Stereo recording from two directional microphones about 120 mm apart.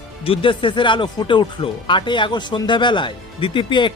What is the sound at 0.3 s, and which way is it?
Speech, 45° left (ahead or behind).